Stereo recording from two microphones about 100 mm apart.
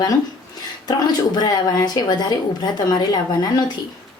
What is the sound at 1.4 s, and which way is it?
A woman's voice, 45° left (ahead or behind).